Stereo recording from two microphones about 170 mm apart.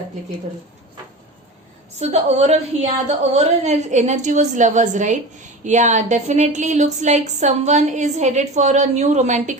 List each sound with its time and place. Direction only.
2.0 s a woman's voice: 35° right (ahead or behind)